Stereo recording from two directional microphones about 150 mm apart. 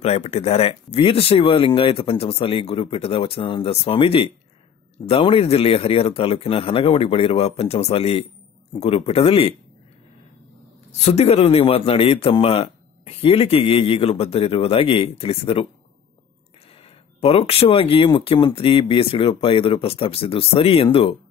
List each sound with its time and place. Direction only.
0.0 s speech: 45° left (ahead or behind)
10.9 s speech: 45° left (ahead or behind)
17.2 s speech: 40° left (ahead or behind)